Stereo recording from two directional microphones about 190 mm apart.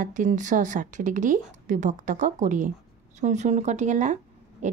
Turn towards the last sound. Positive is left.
turn(degrees=-40)  # may be behind; listen again after turning